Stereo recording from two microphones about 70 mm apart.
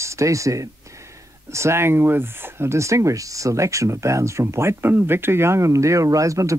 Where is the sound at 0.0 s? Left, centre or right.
Right.